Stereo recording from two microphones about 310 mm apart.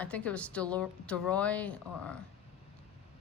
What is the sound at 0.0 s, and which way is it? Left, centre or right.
A woman's voice, centre.